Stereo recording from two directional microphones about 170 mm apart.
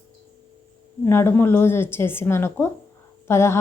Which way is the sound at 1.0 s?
15° left (ahead or behind).